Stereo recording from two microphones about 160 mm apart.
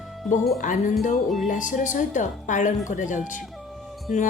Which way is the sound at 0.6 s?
55° left (ahead or behind).